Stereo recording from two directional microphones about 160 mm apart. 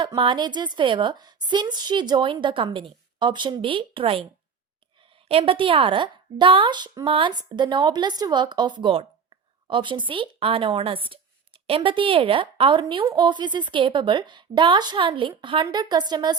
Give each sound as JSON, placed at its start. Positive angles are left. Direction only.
{"t": 0.2, "sound": "a woman's voice", "side_deg": -30}
{"t": 5.3, "sound": "a woman's voice", "side_deg": -35}